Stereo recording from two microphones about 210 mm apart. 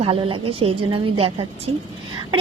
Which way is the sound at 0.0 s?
25° right (ahead or behind).